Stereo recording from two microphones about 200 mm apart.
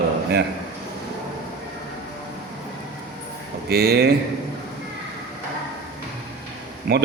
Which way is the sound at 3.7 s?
50° right (ahead or behind).